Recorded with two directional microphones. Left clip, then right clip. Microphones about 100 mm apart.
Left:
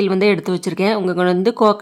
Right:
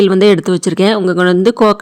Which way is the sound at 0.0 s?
35° right (ahead or behind).